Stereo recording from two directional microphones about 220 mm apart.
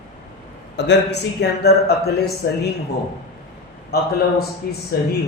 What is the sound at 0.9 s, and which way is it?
A man's voice, 50° left (ahead or behind).